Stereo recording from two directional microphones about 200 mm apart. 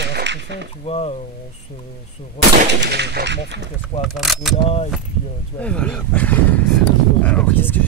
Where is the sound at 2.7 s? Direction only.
55° right (ahead or behind).